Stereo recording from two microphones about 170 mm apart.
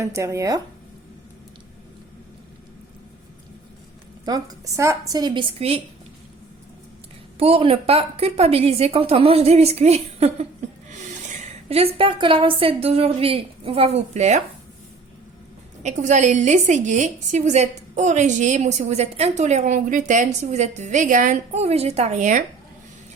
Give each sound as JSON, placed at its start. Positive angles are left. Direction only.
{"t": 0.0, "sound": "speech", "side_deg": -15}
{"t": 4.3, "sound": "a woman's voice", "side_deg": -20}
{"t": 7.3, "sound": "a woman's voice", "side_deg": -35}
{"t": 11.7, "sound": "a woman's voice", "side_deg": -35}
{"t": 15.8, "sound": "a woman's voice", "side_deg": -45}